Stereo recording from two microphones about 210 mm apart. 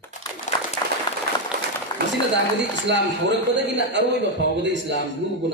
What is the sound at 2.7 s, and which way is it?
A man's voice, 55° right (ahead or behind).